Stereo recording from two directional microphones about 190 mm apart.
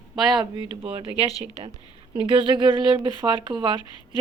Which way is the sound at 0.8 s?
30° right (ahead or behind).